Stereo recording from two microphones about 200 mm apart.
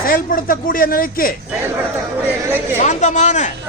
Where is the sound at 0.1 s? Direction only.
45° left (ahead or behind).